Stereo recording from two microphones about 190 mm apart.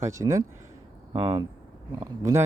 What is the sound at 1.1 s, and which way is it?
Speech, 30° right (ahead or behind).